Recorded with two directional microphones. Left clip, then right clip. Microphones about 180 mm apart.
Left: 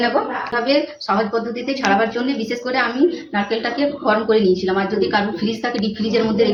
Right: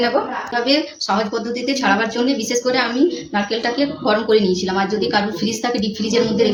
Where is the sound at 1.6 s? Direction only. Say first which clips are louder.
Even; 15° right (ahead or behind).